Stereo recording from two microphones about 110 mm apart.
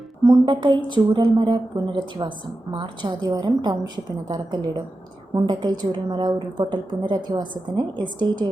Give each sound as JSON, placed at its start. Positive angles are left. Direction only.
{"t": 0.3, "sound": "a woman's voice", "side_deg": -45}